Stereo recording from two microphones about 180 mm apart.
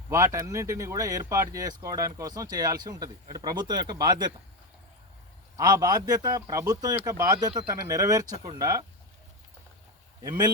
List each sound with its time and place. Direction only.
0.1 s speech: 15° right (ahead or behind)
5.5 s speech: 20° right (ahead or behind)
10.2 s speech: 25° right (ahead or behind)